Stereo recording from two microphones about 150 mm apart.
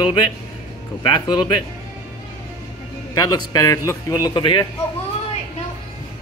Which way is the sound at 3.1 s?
25° left (ahead or behind).